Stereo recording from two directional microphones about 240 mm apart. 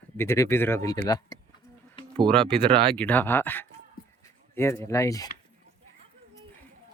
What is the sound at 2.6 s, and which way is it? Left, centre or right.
Speech, right.